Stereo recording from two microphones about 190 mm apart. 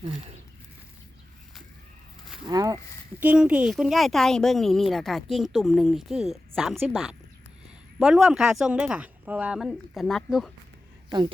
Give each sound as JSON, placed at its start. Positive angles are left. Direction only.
{"t": 2.5, "sound": "speech", "side_deg": -20}
{"t": 3.2, "sound": "a woman's voice", "side_deg": -5}